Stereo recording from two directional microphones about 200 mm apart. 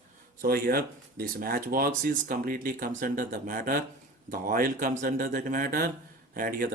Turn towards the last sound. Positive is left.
turn(degrees=-50)  # may be behind; listen again after turning